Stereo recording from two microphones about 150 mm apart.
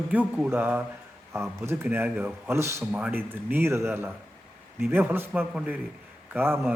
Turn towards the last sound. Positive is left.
turn(degrees=-15)  # may be behind; listen again after turning